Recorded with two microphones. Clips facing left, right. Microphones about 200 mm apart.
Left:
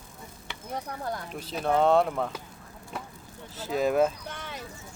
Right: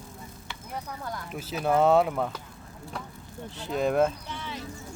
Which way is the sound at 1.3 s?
5° right (ahead or behind).